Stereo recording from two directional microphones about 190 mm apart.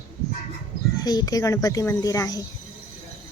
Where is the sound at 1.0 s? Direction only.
20° left (ahead or behind).